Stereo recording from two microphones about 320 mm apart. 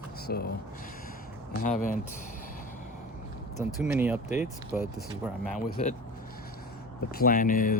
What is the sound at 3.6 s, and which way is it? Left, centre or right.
Speech, centre.